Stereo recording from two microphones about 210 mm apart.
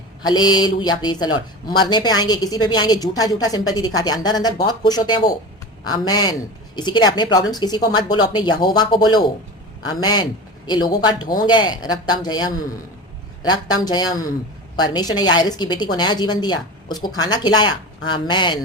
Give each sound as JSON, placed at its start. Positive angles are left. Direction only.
{"t": 0.3, "sound": "speech", "side_deg": 20}